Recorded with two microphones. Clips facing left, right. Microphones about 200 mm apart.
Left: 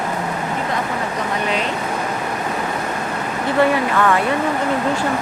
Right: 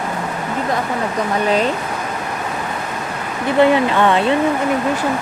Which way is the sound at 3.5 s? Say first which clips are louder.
Right 4 dB; 20° right (ahead or behind).